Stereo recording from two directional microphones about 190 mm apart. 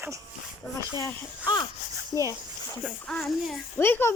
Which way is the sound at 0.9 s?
20° left (ahead or behind).